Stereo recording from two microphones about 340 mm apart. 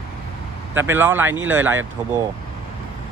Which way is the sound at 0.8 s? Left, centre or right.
Centre.